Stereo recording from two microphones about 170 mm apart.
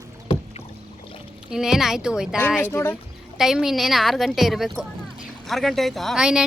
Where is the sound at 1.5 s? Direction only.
5° right (ahead or behind).